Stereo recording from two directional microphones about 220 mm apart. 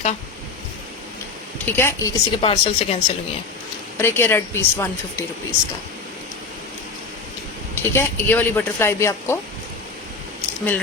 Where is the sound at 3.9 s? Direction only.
10° left (ahead or behind).